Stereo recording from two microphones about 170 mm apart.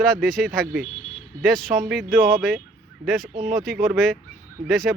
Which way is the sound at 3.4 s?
Centre (ahead or behind).